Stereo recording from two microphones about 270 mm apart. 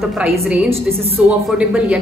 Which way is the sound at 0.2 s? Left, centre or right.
Centre.